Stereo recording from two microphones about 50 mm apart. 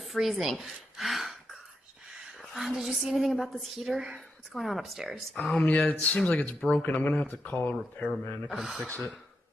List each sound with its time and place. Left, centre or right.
0.0 s speech: centre
2.3 s a woman's voice: centre
5.7 s speech: left
8.5 s a woman's voice: centre